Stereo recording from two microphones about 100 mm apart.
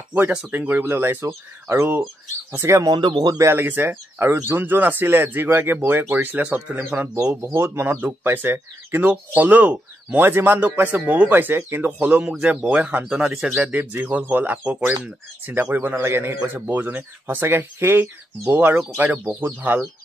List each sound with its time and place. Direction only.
0.1 s speech: 15° right (ahead or behind); by 3.0 s 35° right (ahead or behind)
3.0 s speech: 50° right (ahead or behind)
3.4 s speech: 20° right (ahead or behind)
7.4 s speech: 25° right (ahead or behind)